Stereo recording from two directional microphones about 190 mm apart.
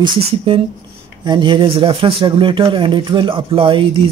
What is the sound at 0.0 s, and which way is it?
Speech, 25° right (ahead or behind).